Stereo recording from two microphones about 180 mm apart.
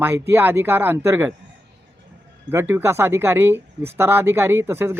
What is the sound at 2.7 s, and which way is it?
Speech, 15° right (ahead or behind).